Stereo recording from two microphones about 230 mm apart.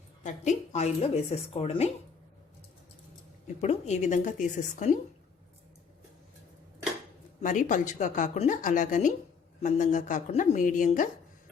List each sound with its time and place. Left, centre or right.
0.2 s a woman's voice: left
3.6 s speech: left
7.4 s speech: left